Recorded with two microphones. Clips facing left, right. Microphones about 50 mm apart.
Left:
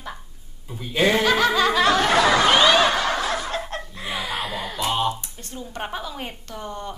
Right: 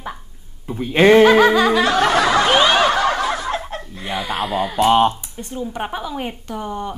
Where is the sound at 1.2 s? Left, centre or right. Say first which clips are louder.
Right 8 dB; right.